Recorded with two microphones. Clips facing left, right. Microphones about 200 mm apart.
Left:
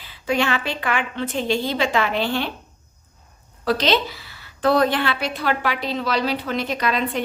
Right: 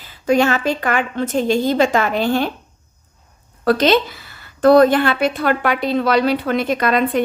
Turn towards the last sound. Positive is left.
turn(degrees=-50)  # may be behind; listen again after turning